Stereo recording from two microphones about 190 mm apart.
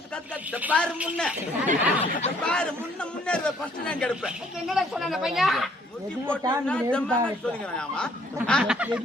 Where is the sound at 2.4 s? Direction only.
5° left (ahead or behind).